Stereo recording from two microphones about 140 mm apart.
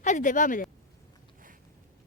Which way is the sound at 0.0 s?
60° left (ahead or behind).